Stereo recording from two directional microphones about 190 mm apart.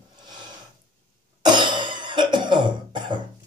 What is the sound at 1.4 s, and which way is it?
Cough, 25° right (ahead or behind).